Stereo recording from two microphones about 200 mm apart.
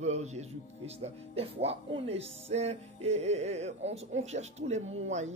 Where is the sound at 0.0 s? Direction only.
35° right (ahead or behind).